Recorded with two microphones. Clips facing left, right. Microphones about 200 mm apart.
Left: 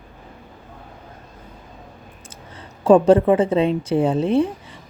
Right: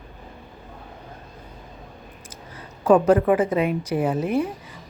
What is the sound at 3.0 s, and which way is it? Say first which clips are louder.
A woman's voice: left 3 dB; 30° left (ahead or behind).